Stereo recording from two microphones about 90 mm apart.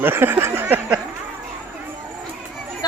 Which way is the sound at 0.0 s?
25° right (ahead or behind).